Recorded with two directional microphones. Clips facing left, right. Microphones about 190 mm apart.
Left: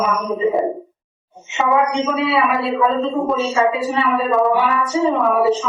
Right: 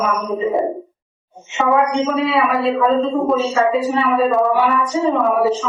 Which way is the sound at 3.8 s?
15° right (ahead or behind).